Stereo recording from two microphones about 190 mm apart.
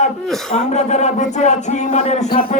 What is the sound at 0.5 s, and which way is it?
A man's voice, 35° left (ahead or behind).